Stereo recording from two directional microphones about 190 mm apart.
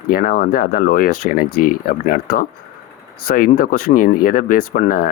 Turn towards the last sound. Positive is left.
turn(degrees=50)  # may be behind; listen again after turning